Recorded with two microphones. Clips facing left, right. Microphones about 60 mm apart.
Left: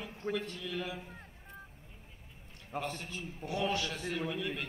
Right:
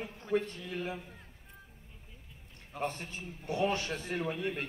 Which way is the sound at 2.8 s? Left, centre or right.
Right.